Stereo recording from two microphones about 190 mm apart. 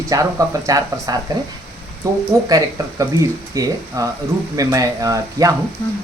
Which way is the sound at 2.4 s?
20° right (ahead or behind).